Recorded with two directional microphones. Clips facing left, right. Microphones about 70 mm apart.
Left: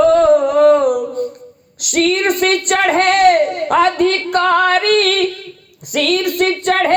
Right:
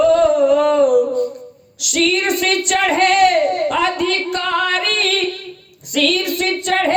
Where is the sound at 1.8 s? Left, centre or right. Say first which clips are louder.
Left 3 dB; left.